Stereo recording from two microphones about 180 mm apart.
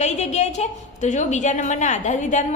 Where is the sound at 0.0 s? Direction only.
40° left (ahead or behind).